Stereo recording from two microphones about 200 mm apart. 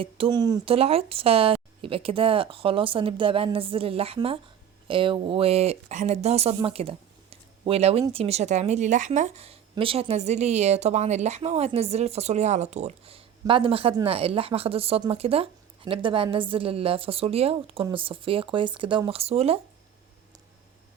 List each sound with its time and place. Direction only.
0.0 s a woman's voice: 25° right (ahead or behind)